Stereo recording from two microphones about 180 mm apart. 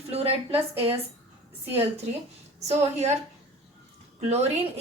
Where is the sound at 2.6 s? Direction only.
40° right (ahead or behind).